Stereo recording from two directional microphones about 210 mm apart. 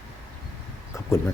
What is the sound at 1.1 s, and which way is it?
Speech, 10° left (ahead or behind).